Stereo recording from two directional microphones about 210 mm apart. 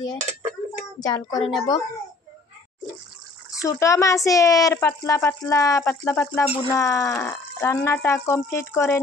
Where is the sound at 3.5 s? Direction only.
15° left (ahead or behind).